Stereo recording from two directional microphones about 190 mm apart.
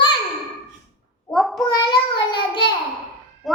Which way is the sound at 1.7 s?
25° left (ahead or behind).